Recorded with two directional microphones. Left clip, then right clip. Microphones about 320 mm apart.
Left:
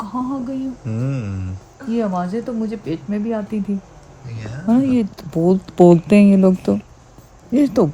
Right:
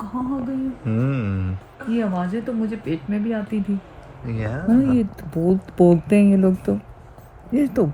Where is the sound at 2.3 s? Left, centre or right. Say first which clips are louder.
Left 2 dB; centre.